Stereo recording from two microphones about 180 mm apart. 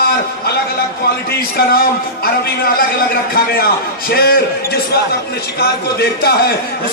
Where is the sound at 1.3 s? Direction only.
55° left (ahead or behind).